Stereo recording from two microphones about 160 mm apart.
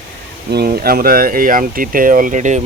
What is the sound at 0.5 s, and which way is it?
Speech, 70° right (ahead or behind).